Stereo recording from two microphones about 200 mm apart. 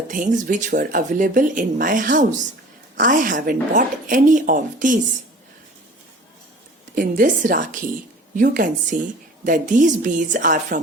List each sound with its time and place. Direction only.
0.1 s speech: 40° right (ahead or behind)
6.9 s speech: 45° right (ahead or behind)